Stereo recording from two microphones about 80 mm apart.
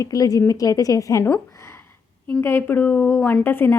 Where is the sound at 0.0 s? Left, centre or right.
Left.